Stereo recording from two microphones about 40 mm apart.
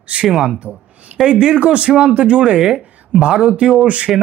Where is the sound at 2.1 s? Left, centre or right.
Right.